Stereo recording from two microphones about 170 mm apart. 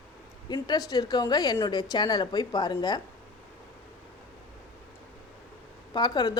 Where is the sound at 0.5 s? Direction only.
25° left (ahead or behind).